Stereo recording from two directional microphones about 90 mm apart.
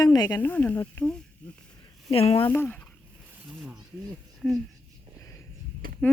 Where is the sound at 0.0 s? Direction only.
45° left (ahead or behind).